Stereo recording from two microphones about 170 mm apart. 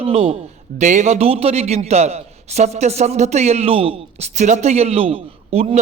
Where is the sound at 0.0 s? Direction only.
35° right (ahead or behind).